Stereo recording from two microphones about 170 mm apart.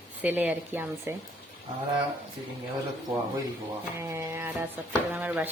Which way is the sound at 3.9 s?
15° right (ahead or behind).